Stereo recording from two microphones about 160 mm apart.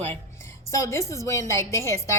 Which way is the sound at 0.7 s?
20° left (ahead or behind).